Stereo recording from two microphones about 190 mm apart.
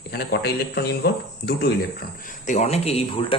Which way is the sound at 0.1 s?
60° left (ahead or behind).